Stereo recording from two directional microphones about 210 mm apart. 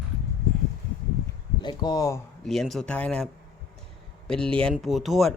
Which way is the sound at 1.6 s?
20° left (ahead or behind).